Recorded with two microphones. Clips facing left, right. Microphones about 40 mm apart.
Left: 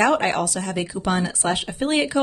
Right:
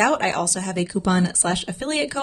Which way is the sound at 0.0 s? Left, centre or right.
Centre.